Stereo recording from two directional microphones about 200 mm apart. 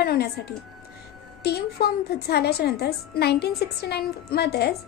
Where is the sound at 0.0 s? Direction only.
50° left (ahead or behind).